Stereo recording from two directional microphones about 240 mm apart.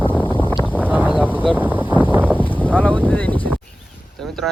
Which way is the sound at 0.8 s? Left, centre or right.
Centre.